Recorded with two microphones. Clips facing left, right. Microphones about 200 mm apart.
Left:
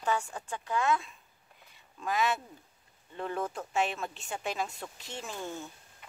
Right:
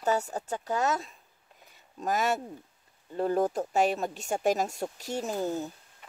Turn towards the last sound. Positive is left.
turn(degrees=-40)  # may be behind; listen again after turning